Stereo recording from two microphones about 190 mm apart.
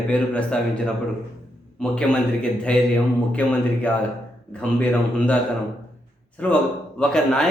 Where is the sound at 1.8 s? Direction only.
5° left (ahead or behind).